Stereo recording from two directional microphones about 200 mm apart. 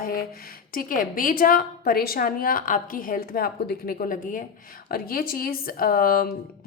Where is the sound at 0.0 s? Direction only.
45° left (ahead or behind).